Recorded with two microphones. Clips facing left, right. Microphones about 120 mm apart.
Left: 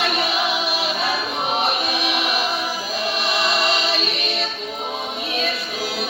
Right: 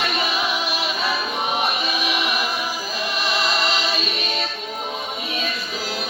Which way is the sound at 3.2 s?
65° left (ahead or behind).